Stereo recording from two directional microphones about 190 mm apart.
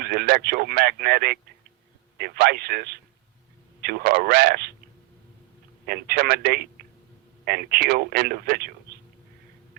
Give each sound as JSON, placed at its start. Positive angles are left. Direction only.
{"t": 0.0, "sound": "speech", "side_deg": -55}
{"t": 5.8, "sound": "speech", "side_deg": -55}